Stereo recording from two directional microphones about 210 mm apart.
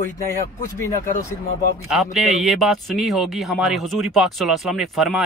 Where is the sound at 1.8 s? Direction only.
Centre (ahead or behind).